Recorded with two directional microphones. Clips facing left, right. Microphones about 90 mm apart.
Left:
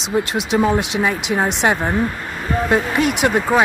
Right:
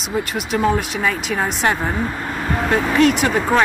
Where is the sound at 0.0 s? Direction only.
90° left.